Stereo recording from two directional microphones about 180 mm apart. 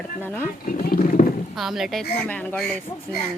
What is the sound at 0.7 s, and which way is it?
Speech, 55° left (ahead or behind).